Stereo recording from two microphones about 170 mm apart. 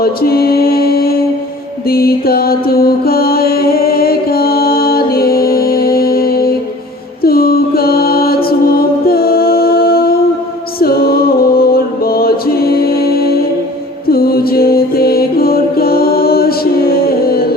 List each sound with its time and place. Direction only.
0.0 s mantra: 65° left (ahead or behind)
10.8 s music: 65° left (ahead or behind)